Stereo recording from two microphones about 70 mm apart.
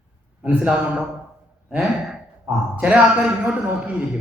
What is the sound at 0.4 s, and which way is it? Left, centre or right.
A man's voice, right.